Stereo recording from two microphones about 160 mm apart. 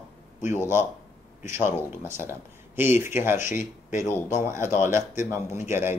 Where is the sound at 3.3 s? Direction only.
50° left (ahead or behind).